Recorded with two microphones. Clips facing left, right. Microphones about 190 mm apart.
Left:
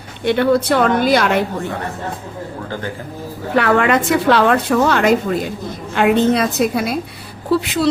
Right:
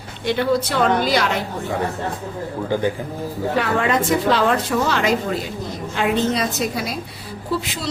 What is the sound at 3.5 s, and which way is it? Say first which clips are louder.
A woman's voice: left 6 dB; 70° left (ahead or behind).